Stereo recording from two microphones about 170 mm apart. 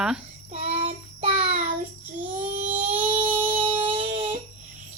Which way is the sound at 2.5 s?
45° right (ahead or behind).